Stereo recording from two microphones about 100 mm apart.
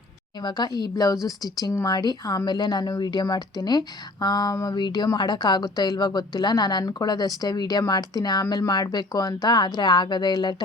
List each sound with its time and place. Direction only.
0.4 s a woman's voice: 45° left (ahead or behind)